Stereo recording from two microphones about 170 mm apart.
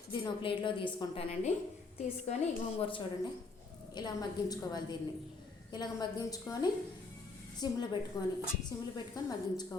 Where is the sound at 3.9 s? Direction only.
25° left (ahead or behind).